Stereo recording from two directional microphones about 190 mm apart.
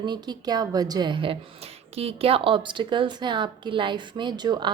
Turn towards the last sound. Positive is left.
turn(degrees=-25)  # may be behind; listen again after turning